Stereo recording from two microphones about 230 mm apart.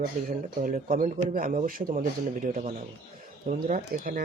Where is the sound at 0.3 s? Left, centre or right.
Right.